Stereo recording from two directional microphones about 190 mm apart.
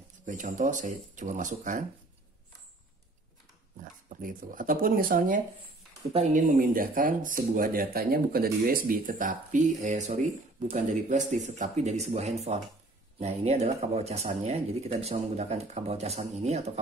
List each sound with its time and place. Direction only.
0.3 s speech: 40° right (ahead or behind)
3.8 s speech: 45° right (ahead or behind)